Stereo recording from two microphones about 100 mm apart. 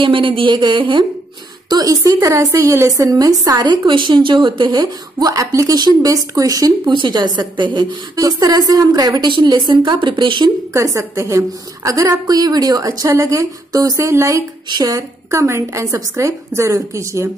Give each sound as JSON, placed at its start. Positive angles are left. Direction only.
{"t": 0.0, "sound": "a woman's voice", "side_deg": -55}
{"t": 1.7, "sound": "speech", "side_deg": -40}
{"t": 6.9, "sound": "a woman's voice", "side_deg": -50}
{"t": 8.2, "sound": "a woman's voice", "side_deg": -40}
{"t": 10.7, "sound": "speech", "side_deg": -30}